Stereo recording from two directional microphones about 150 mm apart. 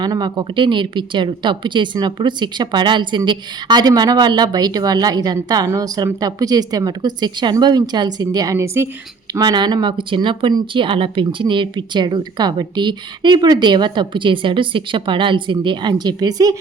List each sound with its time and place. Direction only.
0.0 s speech: 25° right (ahead or behind)
9.3 s speech: 30° right (ahead or behind)